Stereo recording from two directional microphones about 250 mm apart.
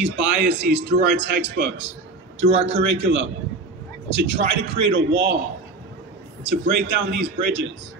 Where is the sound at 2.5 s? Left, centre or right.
Right.